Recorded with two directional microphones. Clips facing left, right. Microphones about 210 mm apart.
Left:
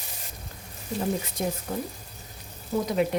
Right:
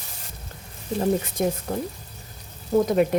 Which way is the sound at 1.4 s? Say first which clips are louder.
Right 5 dB; 60° right (ahead or behind).